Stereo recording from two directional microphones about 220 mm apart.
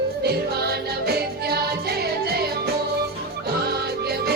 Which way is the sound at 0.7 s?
45° right (ahead or behind).